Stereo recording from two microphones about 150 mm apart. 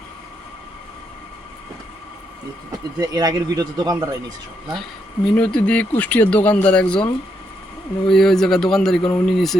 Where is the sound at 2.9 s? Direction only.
25° right (ahead or behind).